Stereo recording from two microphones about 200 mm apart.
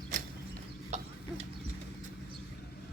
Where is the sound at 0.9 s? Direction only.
35° right (ahead or behind).